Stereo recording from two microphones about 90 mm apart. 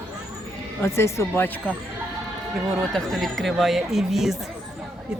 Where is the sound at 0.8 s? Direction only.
30° left (ahead or behind).